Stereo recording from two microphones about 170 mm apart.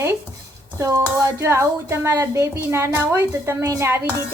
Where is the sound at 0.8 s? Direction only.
15° right (ahead or behind).